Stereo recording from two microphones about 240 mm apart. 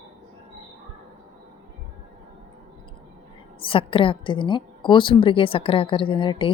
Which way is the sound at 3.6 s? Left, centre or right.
Left.